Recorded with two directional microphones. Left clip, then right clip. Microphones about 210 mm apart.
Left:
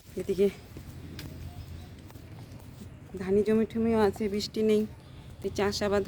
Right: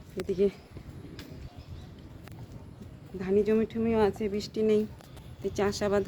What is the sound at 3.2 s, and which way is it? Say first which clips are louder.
Speech: even; 25° left (ahead or behind).